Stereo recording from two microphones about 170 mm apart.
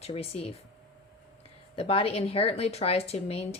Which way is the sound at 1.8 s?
35° left (ahead or behind).